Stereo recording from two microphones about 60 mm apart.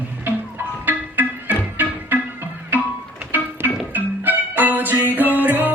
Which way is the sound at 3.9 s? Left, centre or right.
Right.